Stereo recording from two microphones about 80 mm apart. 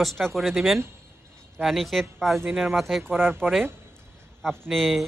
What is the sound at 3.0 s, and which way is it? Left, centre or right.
Speech, right.